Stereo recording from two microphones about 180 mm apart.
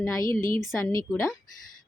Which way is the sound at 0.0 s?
15° left (ahead or behind).